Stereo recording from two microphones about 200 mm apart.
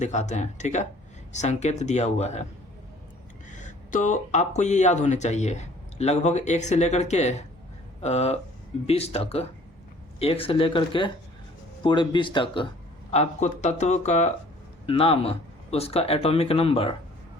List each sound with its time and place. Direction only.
0.0 s speech: 35° left (ahead or behind)
3.5 s speech: 40° left (ahead or behind)
13.1 s speech: 35° left (ahead or behind)